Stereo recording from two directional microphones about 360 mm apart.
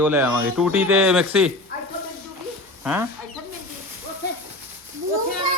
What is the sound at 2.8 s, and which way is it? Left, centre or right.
Speech, centre.